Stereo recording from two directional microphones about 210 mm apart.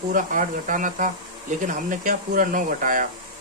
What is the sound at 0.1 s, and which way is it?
Speech, 40° right (ahead or behind).